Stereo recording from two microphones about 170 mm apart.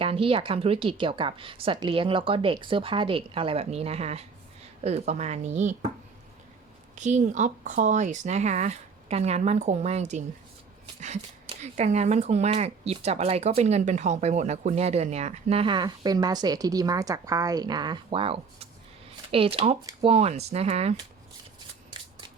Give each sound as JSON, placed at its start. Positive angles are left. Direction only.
{"t": 0.0, "sound": "speech", "side_deg": -35}
{"t": 6.9, "sound": "speech", "side_deg": -45}